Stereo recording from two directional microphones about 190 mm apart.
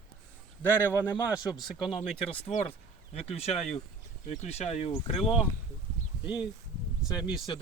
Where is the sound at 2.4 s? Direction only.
30° left (ahead or behind).